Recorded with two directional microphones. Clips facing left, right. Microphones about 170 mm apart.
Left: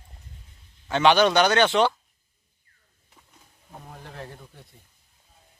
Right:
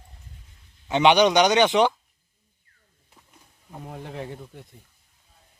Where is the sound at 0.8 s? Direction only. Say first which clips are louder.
Right 1 dB; 20° right (ahead or behind).